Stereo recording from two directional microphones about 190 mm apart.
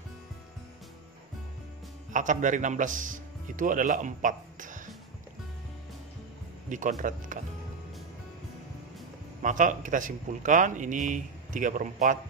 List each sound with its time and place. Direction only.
2.1 s speech: 40° right (ahead or behind)
6.7 s speech: 40° right (ahead or behind)
9.4 s speech: 45° right (ahead or behind)